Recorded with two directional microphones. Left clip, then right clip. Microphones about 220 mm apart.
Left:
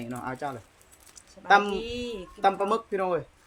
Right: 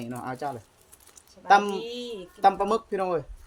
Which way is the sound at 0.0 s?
20° right (ahead or behind).